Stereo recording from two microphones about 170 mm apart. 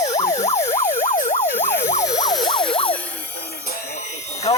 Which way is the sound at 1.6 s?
15° left (ahead or behind).